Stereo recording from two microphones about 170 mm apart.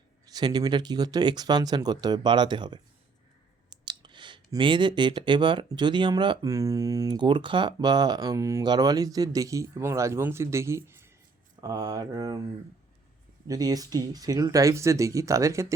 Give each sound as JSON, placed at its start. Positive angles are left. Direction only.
{"t": 0.3, "sound": "speech", "side_deg": -25}
{"t": 13.5, "sound": "speech", "side_deg": -20}